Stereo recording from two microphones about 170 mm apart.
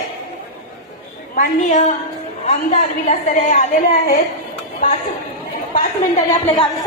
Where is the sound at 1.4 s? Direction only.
45° left (ahead or behind).